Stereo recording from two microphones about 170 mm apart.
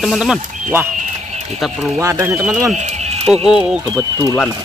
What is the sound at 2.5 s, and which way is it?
Speech, 5° right (ahead or behind).